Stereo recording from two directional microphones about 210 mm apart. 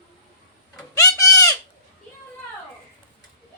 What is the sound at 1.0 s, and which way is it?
Bird, 15° left (ahead or behind).